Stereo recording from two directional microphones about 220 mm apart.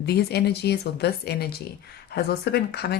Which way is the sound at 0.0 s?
45° left (ahead or behind).